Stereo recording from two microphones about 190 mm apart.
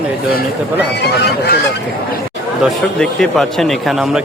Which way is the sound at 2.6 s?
Centre (ahead or behind).